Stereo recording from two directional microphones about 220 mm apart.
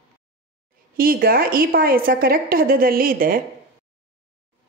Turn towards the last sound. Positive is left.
turn(degrees=-40)  # may be behind; listen again after turning